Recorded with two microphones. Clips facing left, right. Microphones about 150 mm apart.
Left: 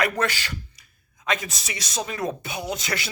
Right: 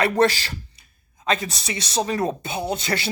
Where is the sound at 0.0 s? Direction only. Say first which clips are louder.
Right 6 dB; 35° right (ahead or behind).